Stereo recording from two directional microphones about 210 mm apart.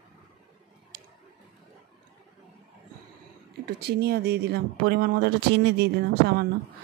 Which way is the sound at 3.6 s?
50° right (ahead or behind).